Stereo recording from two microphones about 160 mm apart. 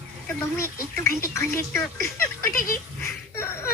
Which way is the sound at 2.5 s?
60° left (ahead or behind).